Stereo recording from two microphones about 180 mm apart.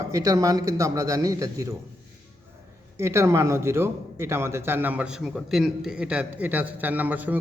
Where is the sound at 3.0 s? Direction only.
15° right (ahead or behind).